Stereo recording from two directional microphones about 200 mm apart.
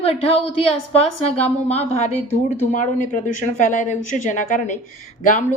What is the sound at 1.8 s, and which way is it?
Speech, 35° left (ahead or behind).